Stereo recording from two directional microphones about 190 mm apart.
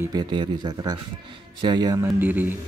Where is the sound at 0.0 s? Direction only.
20° right (ahead or behind).